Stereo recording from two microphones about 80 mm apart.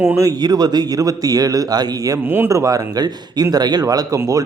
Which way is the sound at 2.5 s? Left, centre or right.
Right.